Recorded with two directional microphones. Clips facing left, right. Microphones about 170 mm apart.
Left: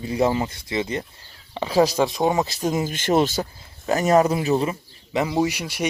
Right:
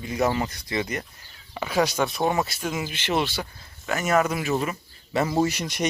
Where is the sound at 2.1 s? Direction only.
20° left (ahead or behind).